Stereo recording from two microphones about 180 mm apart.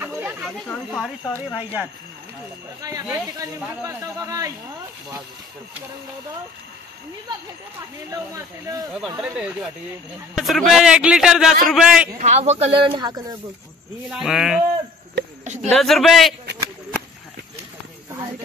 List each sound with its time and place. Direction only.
0.0 s snake: 10° right (ahead or behind)
0.7 s a man's voice: centre (ahead or behind); by 4.5 s 20° right (ahead or behind)
8.6 s speech: 20° right (ahead or behind)
9.2 s a man's voice: 5° right (ahead or behind)
12.2 s speech: 40° right (ahead or behind); by 13.4 s 25° right (ahead or behind)
14.1 s a man's voice: centre (ahead or behind)
15.4 s a sound: 40° right (ahead or behind)
15.8 s a man's voice: centre (ahead or behind)